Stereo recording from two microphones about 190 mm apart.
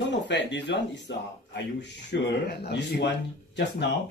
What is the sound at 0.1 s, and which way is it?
Speech, 65° left (ahead or behind).